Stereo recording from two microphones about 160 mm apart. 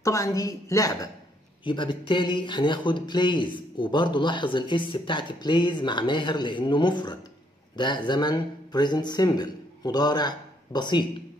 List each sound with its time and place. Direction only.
0.0 s speech: 20° left (ahead or behind)